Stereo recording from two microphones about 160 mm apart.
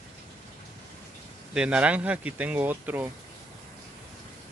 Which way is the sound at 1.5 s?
5° right (ahead or behind).